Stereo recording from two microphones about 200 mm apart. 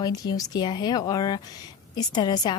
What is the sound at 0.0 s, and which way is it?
A woman's voice, 20° left (ahead or behind).